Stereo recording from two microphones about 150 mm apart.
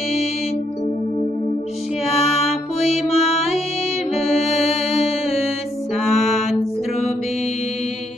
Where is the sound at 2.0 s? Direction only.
45° left (ahead or behind).